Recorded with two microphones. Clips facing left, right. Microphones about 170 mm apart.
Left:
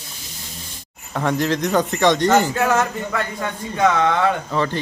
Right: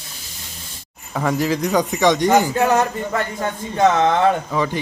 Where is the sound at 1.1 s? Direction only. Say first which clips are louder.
Even; 5° right (ahead or behind).